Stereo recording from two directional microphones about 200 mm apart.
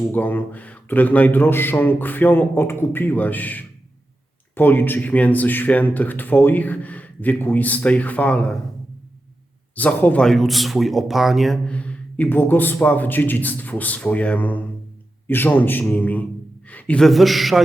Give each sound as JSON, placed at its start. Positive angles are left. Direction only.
{"t": 0.1, "sound": "a man's voice", "side_deg": 10}
{"t": 9.7, "sound": "a man's voice", "side_deg": 10}